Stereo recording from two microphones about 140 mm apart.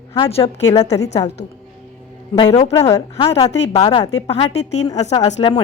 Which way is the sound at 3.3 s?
50° left (ahead or behind).